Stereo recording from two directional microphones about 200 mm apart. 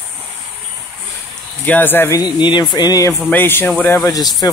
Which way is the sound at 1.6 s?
10° left (ahead or behind).